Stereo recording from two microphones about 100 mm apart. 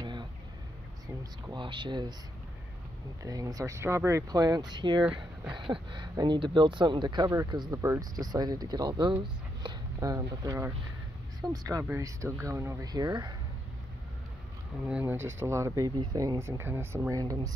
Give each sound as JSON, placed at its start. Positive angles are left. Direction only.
{"t": 0.0, "sound": "a sound", "side_deg": -50}
{"t": 1.0, "sound": "speech", "side_deg": -50}
{"t": 3.2, "sound": "speech", "side_deg": -35}
{"t": 4.3, "sound": "speech", "side_deg": -40}
{"t": 7.8, "sound": "speech", "side_deg": -35}
{"t": 11.9, "sound": "speech", "side_deg": -30}
{"t": 12.8, "sound": "speech", "side_deg": -40}
{"t": 14.9, "sound": "speech", "side_deg": -15}
{"t": 16.0, "sound": "speech", "side_deg": -45}
{"t": 16.3, "sound": "speech", "side_deg": -25}
{"t": 17.1, "sound": "speech", "side_deg": -35}